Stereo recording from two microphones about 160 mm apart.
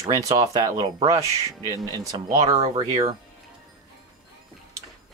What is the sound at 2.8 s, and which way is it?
Speech, 40° right (ahead or behind).